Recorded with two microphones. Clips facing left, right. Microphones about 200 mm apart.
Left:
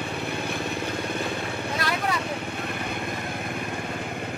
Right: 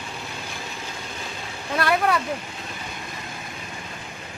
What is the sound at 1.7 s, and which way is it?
Vehicle, 60° right (ahead or behind).